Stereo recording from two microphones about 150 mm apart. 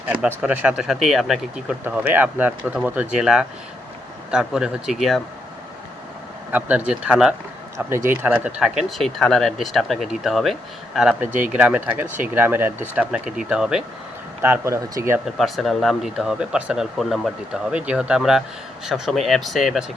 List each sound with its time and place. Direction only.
0.0 s speech: 10° right (ahead or behind)
6.5 s speech: 10° right (ahead or behind)
7.8 s speech: 15° right (ahead or behind)
14.4 s speech: 15° right (ahead or behind)
15.4 s speech: centre (ahead or behind)